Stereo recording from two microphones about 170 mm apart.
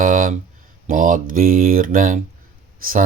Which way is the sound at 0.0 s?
55° right (ahead or behind).